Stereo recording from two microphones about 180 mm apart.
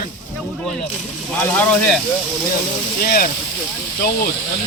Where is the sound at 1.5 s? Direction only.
10° left (ahead or behind).